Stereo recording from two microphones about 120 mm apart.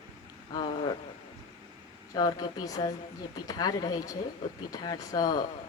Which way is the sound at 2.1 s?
35° left (ahead or behind).